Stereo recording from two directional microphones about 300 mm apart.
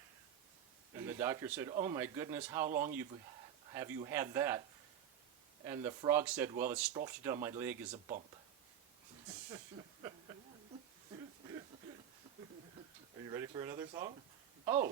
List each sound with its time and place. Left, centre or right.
0.9 s a man's voice: centre
2.6 s speech: right
3.7 s a man's voice: centre
5.6 s a man's voice: centre
13.2 s a man's voice: centre
14.6 s a sound: centre